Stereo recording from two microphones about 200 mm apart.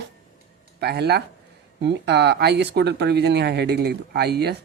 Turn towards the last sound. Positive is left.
turn(degrees=-55)  # may be behind; listen again after turning